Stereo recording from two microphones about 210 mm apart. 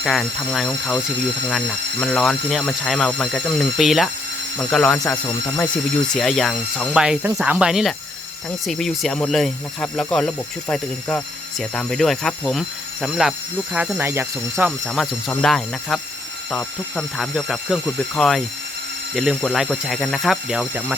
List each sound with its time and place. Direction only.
0.0 s speech: centre (ahead or behind)
14.8 s speech: 5° left (ahead or behind)